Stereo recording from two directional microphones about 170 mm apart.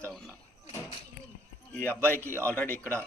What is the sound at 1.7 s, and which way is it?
A man's voice, 10° left (ahead or behind).